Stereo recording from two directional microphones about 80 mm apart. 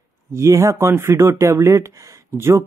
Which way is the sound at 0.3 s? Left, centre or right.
Right.